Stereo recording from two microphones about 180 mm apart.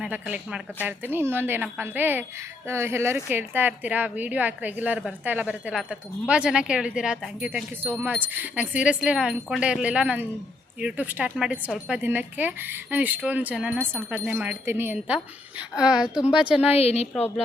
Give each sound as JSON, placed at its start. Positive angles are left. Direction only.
{"t": 0.0, "sound": "a woman's voice", "side_deg": -5}
{"t": 16.6, "sound": "a woman's voice", "side_deg": 35}